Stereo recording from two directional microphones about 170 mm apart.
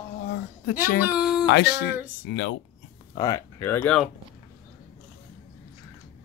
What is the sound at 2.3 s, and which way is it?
Speech, 90° left.